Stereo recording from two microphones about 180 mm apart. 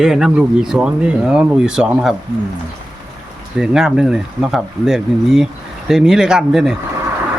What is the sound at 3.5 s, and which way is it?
Speech, centre (ahead or behind).